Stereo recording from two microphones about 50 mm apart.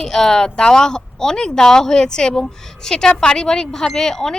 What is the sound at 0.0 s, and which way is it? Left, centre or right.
Speech, centre.